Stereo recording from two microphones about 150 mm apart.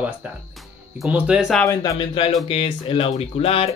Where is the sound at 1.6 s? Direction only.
25° left (ahead or behind).